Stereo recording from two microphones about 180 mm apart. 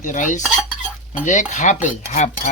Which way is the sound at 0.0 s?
45° left (ahead or behind).